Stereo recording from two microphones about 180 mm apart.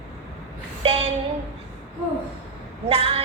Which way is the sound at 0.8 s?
30° right (ahead or behind).